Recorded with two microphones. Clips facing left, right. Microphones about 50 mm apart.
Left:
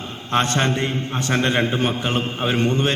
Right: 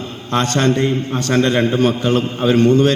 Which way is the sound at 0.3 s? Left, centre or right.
Left.